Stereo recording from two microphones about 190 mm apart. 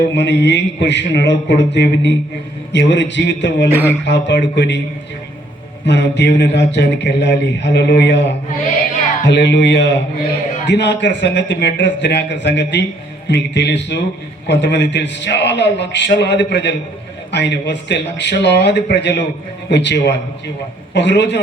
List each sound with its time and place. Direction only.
0.1 s a man's voice: 65° left (ahead or behind)
5.8 s speech: 65° left (ahead or behind)